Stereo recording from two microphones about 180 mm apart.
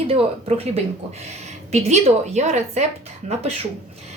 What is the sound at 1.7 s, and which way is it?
A woman's voice, 40° right (ahead or behind).